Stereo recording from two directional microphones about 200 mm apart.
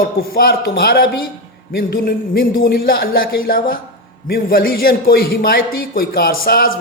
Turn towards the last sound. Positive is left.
turn(degrees=50)  # may be behind; listen again after turning